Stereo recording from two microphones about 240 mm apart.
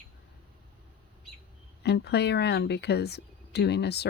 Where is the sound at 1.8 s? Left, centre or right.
Left.